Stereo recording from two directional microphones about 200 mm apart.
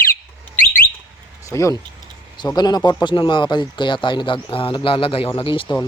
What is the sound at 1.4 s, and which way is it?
Speech, 15° left (ahead or behind).